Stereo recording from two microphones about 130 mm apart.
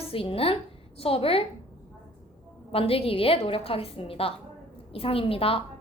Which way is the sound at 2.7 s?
45° left (ahead or behind).